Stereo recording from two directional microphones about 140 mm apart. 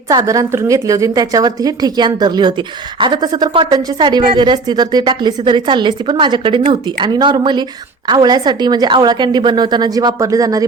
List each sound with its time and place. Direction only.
0.1 s a woman's voice: 25° right (ahead or behind)